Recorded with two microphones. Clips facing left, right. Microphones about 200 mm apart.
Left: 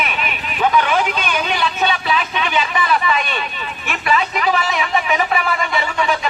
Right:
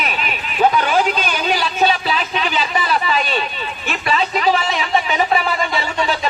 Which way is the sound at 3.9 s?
30° right (ahead or behind).